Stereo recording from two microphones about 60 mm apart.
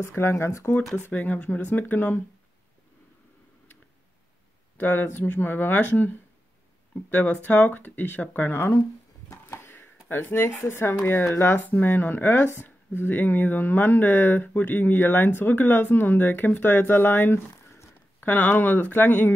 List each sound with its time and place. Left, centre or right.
0.0 s speech: left
1.1 s speech: left
4.7 s speech: left
9.3 s a sound: left
10.0 s speech: left